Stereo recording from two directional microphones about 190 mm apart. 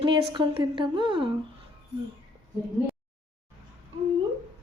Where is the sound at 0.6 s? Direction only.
25° right (ahead or behind).